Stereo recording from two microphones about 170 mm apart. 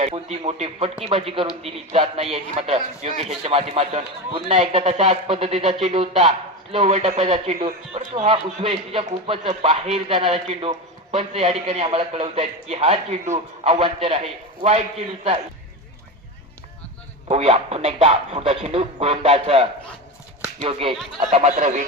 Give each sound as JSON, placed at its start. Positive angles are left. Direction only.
{"t": 0.0, "sound": "speech", "side_deg": -40}
{"t": 17.2, "sound": "speech", "side_deg": -35}